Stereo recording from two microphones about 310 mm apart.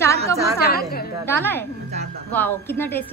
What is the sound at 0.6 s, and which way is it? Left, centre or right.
Speech, left.